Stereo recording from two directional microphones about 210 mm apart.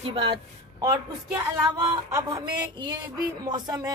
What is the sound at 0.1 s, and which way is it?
Speech, 25° right (ahead or behind).